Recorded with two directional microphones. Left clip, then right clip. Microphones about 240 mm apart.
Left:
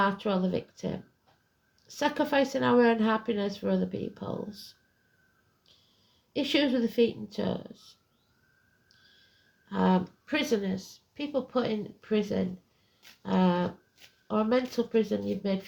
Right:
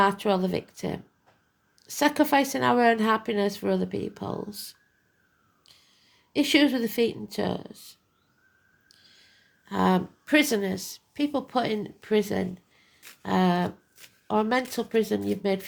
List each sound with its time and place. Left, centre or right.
0.0 s speech: right
6.3 s speech: right
9.6 s speech: right